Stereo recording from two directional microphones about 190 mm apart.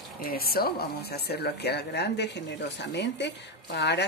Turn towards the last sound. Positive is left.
turn(degrees=60)  # may be behind; listen again after turning